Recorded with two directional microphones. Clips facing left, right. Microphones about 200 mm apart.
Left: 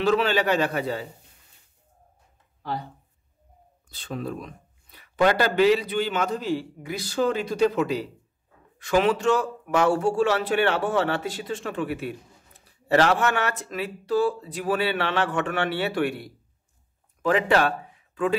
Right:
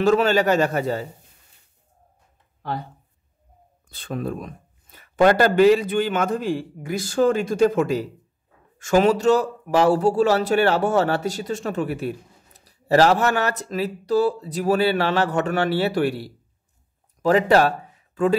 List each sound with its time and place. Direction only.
0.0 s speech: 45° right (ahead or behind)
3.9 s speech: 55° right (ahead or behind)